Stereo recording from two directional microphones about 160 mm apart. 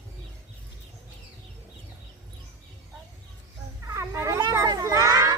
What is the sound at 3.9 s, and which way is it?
Children playing, 20° right (ahead or behind).